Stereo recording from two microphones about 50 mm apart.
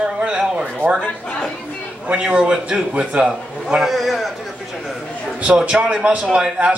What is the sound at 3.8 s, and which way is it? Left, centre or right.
Speech, centre.